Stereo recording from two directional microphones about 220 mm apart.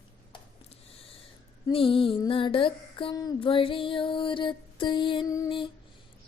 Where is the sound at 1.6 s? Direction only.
25° left (ahead or behind).